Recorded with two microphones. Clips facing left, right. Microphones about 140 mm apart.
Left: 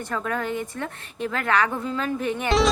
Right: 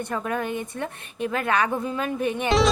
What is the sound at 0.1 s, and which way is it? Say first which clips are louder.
A woman's voice: left 2 dB; 20° right (ahead or behind).